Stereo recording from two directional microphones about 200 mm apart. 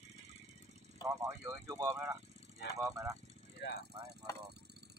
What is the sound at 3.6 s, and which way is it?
Speech, 60° left (ahead or behind).